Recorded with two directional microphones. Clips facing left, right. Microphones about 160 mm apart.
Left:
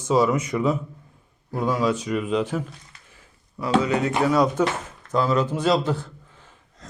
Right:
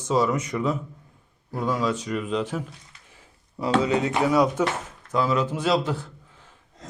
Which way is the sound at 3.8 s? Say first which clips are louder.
Left 1 dB; 25° right (ahead or behind).